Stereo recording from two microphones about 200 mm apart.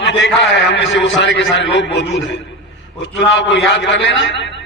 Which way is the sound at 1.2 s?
65° left (ahead or behind).